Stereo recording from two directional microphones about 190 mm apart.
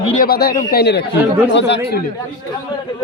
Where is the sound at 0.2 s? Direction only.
55° left (ahead or behind).